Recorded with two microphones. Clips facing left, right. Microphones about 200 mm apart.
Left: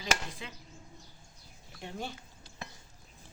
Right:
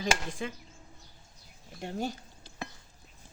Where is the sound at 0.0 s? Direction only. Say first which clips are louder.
Right 4 dB; 50° right (ahead or behind).